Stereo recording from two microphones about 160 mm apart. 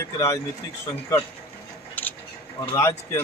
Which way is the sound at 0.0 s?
20° left (ahead or behind).